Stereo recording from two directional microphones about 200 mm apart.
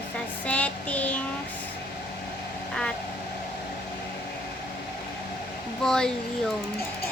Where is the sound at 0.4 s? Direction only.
5° left (ahead or behind).